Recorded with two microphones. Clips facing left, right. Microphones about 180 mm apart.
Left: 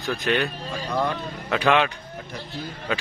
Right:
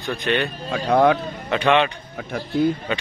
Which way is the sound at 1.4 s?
Centre (ahead or behind).